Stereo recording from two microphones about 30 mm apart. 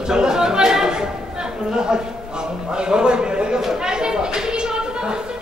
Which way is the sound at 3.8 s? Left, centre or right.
Right.